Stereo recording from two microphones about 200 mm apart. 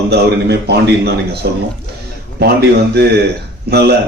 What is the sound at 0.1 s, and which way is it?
A man's voice, 55° right (ahead or behind).